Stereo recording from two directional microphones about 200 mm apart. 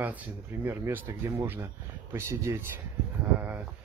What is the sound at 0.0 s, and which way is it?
Speech, 10° right (ahead or behind).